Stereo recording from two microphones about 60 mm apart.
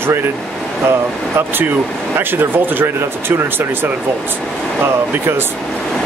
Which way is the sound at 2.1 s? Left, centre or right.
Right.